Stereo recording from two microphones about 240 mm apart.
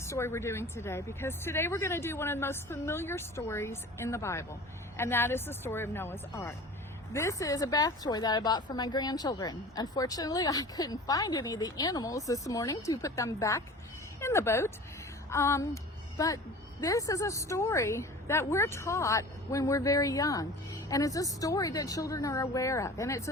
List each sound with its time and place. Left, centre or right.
0.0 s a woman's voice: centre